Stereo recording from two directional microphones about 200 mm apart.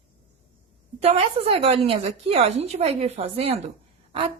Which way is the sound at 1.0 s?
30° right (ahead or behind).